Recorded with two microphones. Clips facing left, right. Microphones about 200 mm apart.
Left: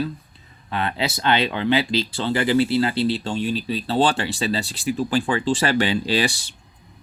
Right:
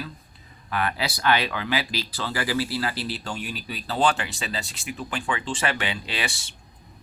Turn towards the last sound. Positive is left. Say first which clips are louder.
# left 10 dB
turn(degrees=35)  # may be behind; listen again after turning